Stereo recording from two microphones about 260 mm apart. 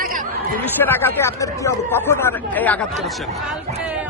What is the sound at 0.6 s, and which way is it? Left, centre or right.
Speech, centre.